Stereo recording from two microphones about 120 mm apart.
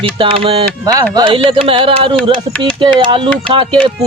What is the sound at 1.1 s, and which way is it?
Speech, 45° right (ahead or behind).